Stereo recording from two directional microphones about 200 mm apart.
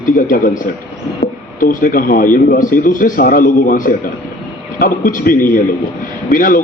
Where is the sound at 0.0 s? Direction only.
45° left (ahead or behind).